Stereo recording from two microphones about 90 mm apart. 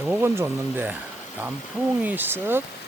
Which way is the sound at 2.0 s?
20° right (ahead or behind).